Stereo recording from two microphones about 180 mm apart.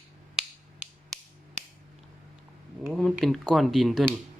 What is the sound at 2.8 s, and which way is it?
Speech, centre (ahead or behind).